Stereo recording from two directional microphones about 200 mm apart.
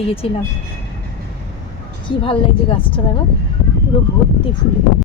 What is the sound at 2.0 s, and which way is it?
Speech, 25° left (ahead or behind).